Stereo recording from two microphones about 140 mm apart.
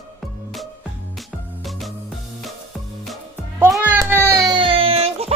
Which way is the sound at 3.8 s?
15° right (ahead or behind).